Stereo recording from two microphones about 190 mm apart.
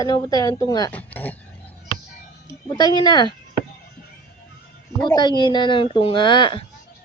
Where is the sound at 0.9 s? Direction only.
10° left (ahead or behind).